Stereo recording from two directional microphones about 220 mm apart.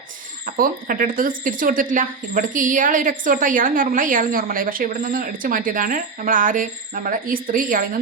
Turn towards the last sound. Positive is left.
turn(degrees=-40)  # may be behind; listen again after turning